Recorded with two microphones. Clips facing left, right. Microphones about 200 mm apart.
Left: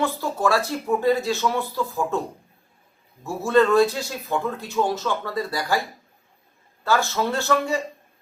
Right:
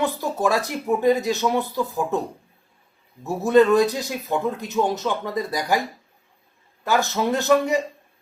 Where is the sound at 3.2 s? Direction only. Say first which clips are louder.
Right 3 dB; 20° right (ahead or behind).